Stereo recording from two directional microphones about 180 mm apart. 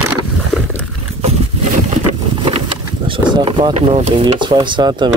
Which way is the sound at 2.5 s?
30° right (ahead or behind).